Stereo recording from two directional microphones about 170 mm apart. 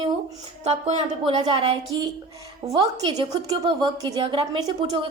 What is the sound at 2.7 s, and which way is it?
A woman's voice, 25° right (ahead or behind).